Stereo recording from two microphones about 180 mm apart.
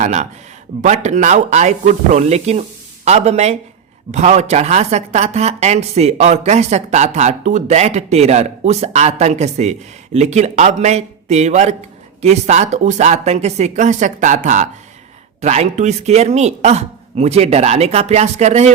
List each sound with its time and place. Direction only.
0.0 s speech: 40° right (ahead or behind)